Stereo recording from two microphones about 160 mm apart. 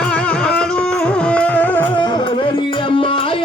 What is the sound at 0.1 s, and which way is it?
Music, 5° left (ahead or behind).